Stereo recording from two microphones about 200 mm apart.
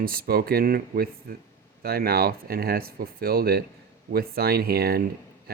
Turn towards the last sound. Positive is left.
turn(degrees=-50)  # may be behind; listen again after turning